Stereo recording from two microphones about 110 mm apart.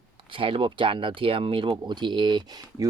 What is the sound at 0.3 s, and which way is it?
Speech, 55° right (ahead or behind).